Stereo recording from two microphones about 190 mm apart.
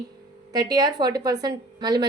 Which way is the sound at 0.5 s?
20° right (ahead or behind).